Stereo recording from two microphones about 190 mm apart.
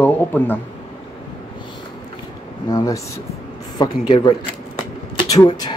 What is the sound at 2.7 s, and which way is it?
Speech, 20° left (ahead or behind).